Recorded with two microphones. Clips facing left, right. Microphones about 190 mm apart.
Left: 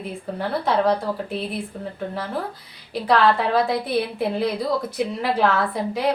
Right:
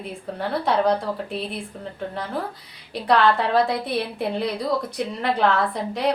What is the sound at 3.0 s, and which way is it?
A woman's voice, centre (ahead or behind).